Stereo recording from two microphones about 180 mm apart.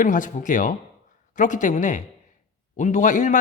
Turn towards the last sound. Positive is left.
turn(degrees=45)  # may be behind; listen again after turning